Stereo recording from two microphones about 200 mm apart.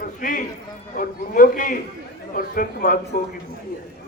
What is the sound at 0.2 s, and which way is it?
A man's voice, 45° left (ahead or behind).